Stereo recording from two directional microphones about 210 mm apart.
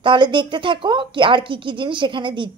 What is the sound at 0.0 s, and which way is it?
Speech, 25° right (ahead or behind).